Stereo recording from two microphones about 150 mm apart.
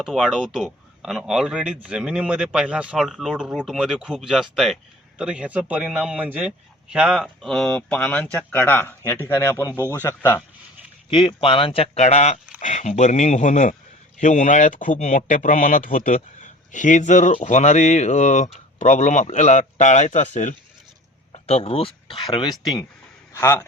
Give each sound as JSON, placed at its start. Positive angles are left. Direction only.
{"t": 0.0, "sound": "speech", "side_deg": 0}
{"t": 11.1, "sound": "speech", "side_deg": 35}
{"t": 21.3, "sound": "speech", "side_deg": 40}
{"t": 23.3, "sound": "speech", "side_deg": 20}